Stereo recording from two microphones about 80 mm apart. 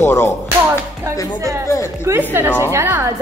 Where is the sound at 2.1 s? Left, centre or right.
Right.